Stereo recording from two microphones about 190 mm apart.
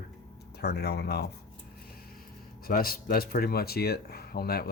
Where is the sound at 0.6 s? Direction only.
60° left (ahead or behind).